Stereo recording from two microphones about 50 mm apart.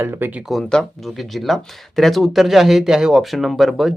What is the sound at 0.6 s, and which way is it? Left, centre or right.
Speech, centre.